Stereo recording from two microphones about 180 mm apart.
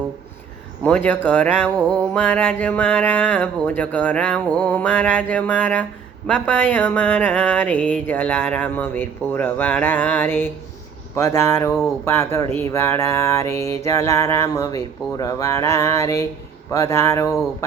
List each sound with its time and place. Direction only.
0.9 s speech: 10° left (ahead or behind)